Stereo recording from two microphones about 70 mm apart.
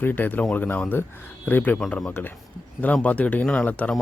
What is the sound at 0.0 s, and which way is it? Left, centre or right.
A man's voice, left.